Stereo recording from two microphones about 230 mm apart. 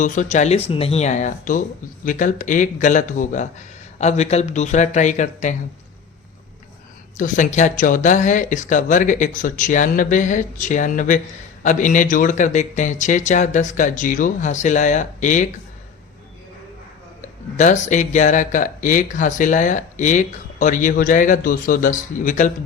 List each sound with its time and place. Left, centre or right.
0.0 s speech: left
7.2 s speech: left
17.2 s speech: left